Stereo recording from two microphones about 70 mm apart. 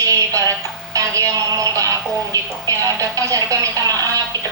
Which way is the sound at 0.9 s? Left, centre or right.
Right.